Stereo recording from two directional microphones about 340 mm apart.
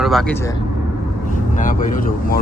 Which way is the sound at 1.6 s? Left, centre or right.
Left.